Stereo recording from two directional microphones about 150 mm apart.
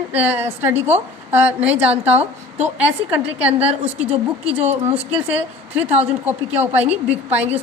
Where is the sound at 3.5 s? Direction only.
40° right (ahead or behind).